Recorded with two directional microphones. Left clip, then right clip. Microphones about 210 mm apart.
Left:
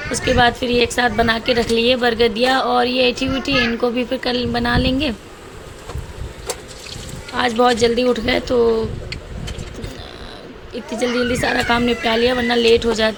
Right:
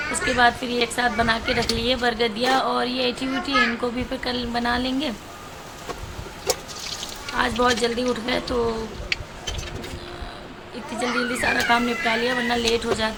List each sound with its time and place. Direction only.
0.3 s a woman's voice: 25° left (ahead or behind)
7.3 s a woman's voice: 25° left (ahead or behind)
11.0 s a woman's voice: 25° left (ahead or behind)